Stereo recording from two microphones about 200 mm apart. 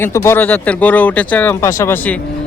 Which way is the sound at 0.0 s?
15° left (ahead or behind).